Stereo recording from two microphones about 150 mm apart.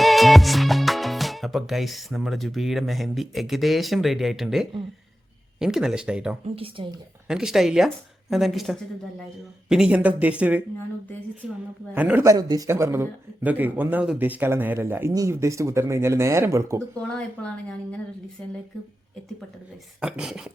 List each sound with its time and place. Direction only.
0.0 s speech: centre (ahead or behind)
6.4 s speech: 40° right (ahead or behind)
7.3 s speech: 5° right (ahead or behind)
11.9 s speech: 10° right (ahead or behind)
17.0 s speech: 5° left (ahead or behind)
20.0 s speech: 5° right (ahead or behind)